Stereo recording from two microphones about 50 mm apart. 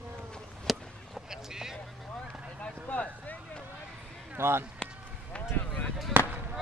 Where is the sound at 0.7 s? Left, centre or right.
Centre.